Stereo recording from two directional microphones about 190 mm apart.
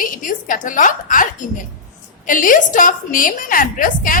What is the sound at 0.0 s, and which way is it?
A woman's voice, 45° left (ahead or behind).